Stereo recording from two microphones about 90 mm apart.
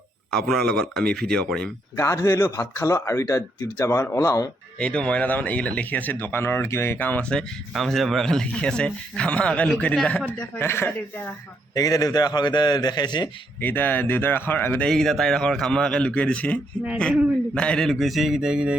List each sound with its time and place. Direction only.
0.4 s speech: 5° left (ahead or behind)
2.0 s a man's voice: 35° left (ahead or behind)
4.8 s speech: 10° left (ahead or behind)
7.7 s speech: centre (ahead or behind)
10.6 s speech: 25° left (ahead or behind)
11.7 s a man's voice: 45° left (ahead or behind)
13.6 s speech: 25° left (ahead or behind)
14.8 s speech: 5° left (ahead or behind)